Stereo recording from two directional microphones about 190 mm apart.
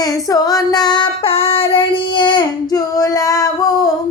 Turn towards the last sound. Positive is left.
turn(degrees=20)  # may be behind; listen again after turning